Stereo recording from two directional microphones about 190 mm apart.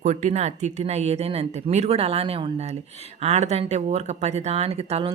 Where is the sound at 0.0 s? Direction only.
35° right (ahead or behind).